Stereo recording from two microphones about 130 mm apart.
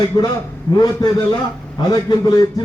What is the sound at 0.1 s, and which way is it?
A man's voice, 30° left (ahead or behind).